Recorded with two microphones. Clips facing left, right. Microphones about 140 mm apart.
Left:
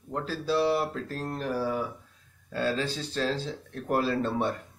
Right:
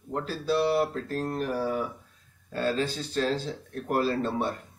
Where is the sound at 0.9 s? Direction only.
45° right (ahead or behind).